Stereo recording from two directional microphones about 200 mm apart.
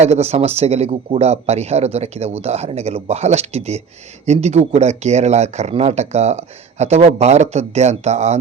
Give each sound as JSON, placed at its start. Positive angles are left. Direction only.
{"t": 0.0, "sound": "speech", "side_deg": -35}